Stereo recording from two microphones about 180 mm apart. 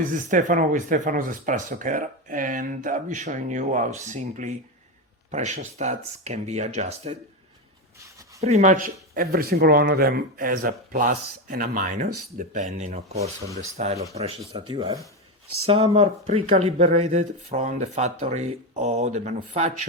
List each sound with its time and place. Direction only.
0.1 s speech: 45° right (ahead or behind)
8.4 s speech: 40° right (ahead or behind)
14.5 s speech: 25° right (ahead or behind)
15.6 s speech: 35° right (ahead or behind)